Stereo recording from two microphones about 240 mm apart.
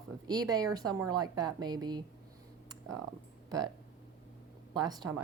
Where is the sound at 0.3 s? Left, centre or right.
Centre.